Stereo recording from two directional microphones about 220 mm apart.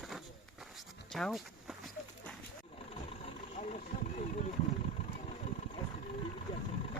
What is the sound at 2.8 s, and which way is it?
Vehicle, 25° left (ahead or behind).